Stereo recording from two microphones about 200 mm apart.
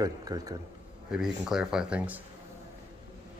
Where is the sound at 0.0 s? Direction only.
20° right (ahead or behind).